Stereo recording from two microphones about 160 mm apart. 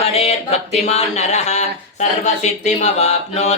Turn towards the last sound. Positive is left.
turn(degrees=45)  # may be behind; listen again after turning